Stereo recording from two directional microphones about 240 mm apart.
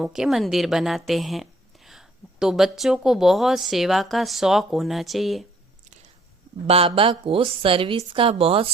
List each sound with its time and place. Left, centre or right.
0.0 s a woman's voice: centre
6.7 s a woman's voice: right